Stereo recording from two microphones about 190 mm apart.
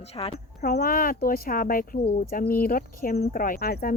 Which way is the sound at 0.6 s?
50° left (ahead or behind).